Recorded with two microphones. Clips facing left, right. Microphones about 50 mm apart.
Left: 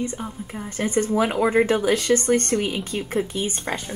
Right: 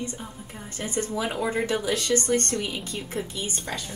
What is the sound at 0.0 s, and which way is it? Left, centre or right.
A woman's voice, left.